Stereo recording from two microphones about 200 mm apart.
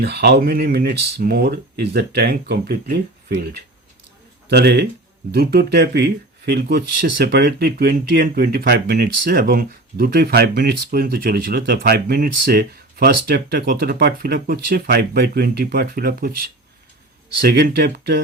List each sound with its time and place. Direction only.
0.0 s speech: 55° right (ahead or behind)